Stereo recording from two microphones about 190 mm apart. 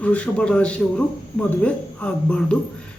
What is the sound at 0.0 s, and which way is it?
Speech, 5° left (ahead or behind).